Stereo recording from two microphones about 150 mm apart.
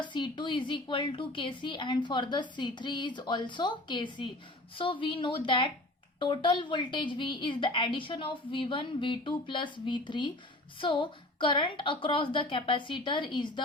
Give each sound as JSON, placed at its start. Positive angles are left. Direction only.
{"t": 0.0, "sound": "speech", "side_deg": 30}